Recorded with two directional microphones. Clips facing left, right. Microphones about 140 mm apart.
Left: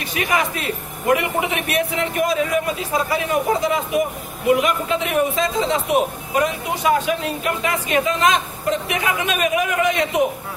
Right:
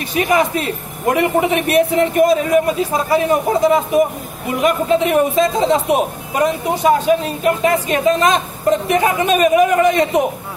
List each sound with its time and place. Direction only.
0.1 s a man's voice: 30° right (ahead or behind)